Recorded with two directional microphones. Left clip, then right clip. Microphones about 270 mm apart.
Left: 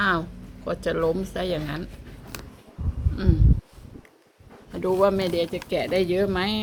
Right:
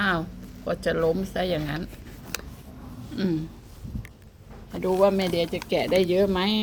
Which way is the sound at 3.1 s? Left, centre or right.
Centre.